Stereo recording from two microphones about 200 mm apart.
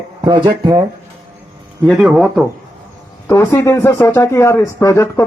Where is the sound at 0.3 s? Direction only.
20° right (ahead or behind).